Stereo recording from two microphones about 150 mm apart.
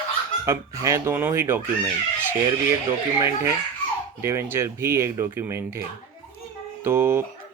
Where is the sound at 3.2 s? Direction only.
15° right (ahead or behind).